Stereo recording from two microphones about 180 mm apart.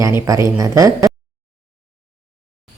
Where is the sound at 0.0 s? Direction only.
15° right (ahead or behind).